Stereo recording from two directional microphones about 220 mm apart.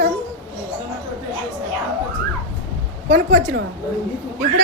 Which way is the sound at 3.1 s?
45° right (ahead or behind).